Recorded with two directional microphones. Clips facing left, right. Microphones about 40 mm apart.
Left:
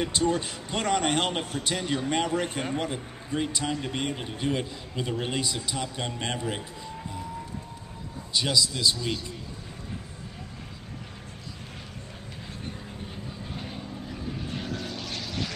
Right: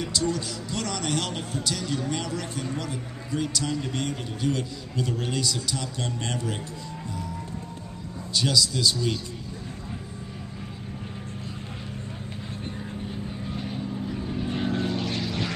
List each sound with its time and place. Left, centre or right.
0.0 s a man's voice: left
8.3 s speech: centre
13.1 s vehicle: centre
14.5 s vehicle: right